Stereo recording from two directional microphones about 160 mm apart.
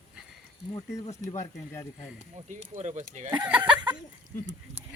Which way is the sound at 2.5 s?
45° right (ahead or behind).